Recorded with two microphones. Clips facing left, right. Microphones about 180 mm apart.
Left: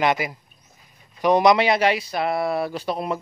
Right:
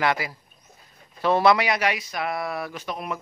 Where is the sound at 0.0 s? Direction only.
20° left (ahead or behind).